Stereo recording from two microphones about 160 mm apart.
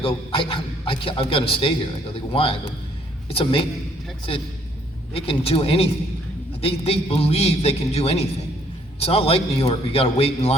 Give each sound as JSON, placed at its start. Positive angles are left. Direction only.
{"t": 0.0, "sound": "a man's voice", "side_deg": 35}
{"t": 5.1, "sound": "a man's voice", "side_deg": 35}